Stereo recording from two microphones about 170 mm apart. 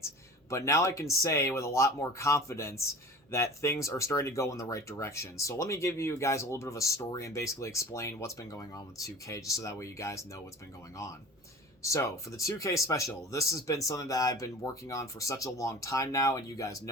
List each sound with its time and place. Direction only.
0.5 s speech: 15° left (ahead or behind)
11.8 s speech: 15° left (ahead or behind)